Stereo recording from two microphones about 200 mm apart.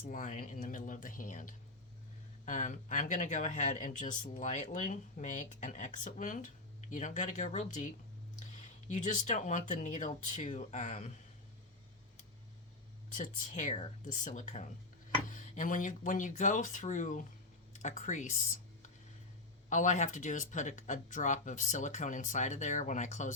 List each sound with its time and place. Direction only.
0.0 s speech: 40° left (ahead or behind)
8.9 s speech: 35° left (ahead or behind)
13.1 s speech: 40° left (ahead or behind)